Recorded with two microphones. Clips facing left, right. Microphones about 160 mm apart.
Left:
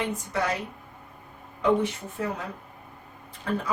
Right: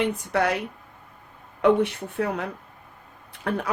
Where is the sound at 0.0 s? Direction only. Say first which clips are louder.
Right 5 dB; 65° right (ahead or behind).